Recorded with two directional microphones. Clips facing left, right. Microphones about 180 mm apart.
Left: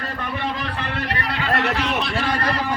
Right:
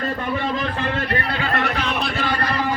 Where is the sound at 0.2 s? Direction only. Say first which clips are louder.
Right 3 dB; 50° right (ahead or behind).